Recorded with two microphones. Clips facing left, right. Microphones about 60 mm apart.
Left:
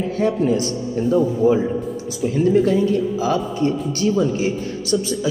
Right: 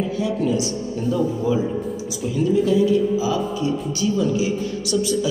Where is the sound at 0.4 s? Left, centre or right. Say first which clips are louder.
Left 2 dB; left.